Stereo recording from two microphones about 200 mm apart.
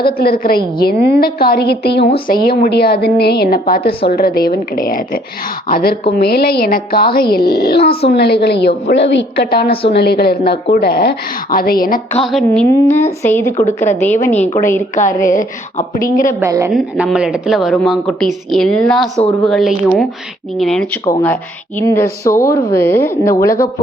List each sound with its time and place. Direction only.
0.0 s a woman's voice: 50° left (ahead or behind)
12.2 s a woman's voice: centre (ahead or behind)
12.5 s a woman's voice: 10° left (ahead or behind)
15.3 s speech: 40° left (ahead or behind)
16.4 s a woman's voice: 15° right (ahead or behind)
16.7 s a woman's voice: centre (ahead or behind)
21.0 s a woman's voice: 20° left (ahead or behind)